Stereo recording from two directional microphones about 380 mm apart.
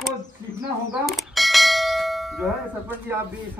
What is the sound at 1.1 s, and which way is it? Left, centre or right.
Bell, centre.